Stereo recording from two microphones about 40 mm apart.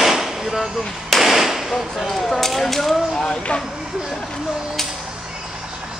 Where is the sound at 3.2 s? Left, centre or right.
Left.